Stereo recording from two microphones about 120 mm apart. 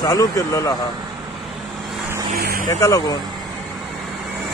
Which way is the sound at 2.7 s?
30° left (ahead or behind).